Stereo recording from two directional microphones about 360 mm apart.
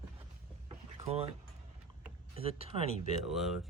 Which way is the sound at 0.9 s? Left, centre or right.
Centre.